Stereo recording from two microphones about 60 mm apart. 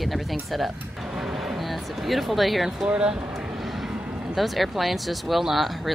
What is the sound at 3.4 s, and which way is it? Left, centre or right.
Vehicle, centre.